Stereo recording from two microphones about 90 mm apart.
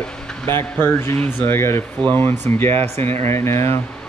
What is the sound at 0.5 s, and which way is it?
A man's voice, 25° left (ahead or behind).